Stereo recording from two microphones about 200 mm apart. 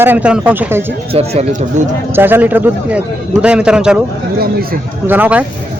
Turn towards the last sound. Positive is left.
turn(degrees=-10)  # may be behind; listen again after turning